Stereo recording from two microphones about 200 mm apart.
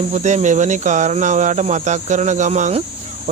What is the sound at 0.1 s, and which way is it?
Speech, 35° right (ahead or behind).